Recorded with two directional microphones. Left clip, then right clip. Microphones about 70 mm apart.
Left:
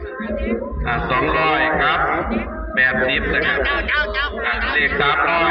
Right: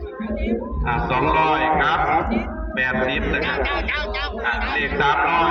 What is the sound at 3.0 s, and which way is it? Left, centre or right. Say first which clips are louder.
A man's voice: left 4 dB; right.